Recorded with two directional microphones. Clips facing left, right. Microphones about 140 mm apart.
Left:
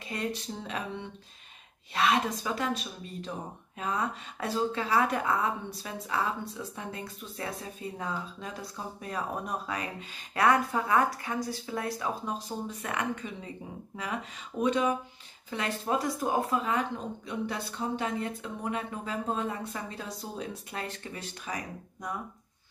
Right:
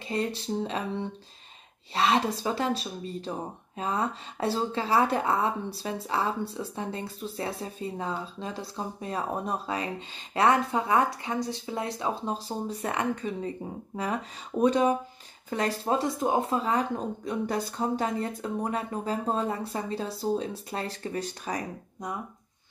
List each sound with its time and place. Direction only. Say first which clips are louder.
0.1 s a woman's voice: right 5 dB; 30° right (ahead or behind)
14.6 s speech: right 4 dB; 40° right (ahead or behind)